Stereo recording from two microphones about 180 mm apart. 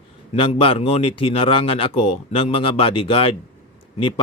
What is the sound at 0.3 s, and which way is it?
Speech, 30° left (ahead or behind).